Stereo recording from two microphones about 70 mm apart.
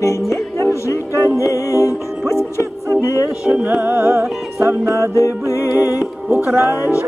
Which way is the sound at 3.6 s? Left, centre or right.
Right.